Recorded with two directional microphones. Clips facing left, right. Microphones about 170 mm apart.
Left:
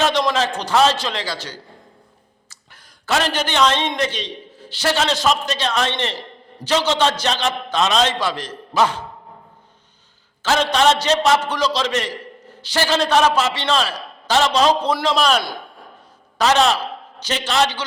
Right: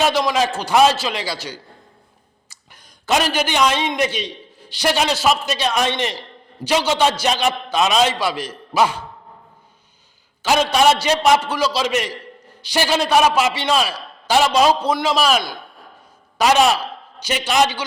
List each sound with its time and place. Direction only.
0.0 s a man's voice: 5° right (ahead or behind)
10.4 s a man's voice: 10° right (ahead or behind)